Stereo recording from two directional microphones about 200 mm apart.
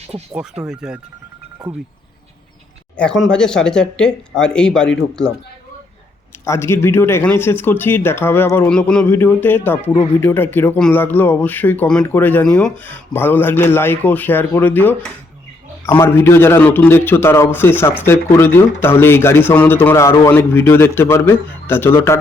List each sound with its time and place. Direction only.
0.7 s speech: 5° right (ahead or behind)
3.2 s speech: 5° left (ahead or behind)
6.4 s speech: 15° left (ahead or behind)